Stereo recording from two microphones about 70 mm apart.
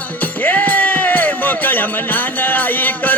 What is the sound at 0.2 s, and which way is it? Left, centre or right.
Music, left.